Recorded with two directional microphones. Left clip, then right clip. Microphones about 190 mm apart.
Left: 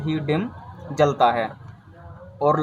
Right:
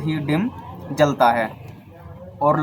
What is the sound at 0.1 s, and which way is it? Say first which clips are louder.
Speech: right 1 dB; 35° left (ahead or behind).